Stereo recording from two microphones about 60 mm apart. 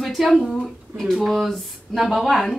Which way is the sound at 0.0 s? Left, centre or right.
Centre.